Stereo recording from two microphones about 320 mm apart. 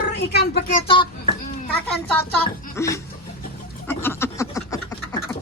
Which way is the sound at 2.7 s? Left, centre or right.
Centre.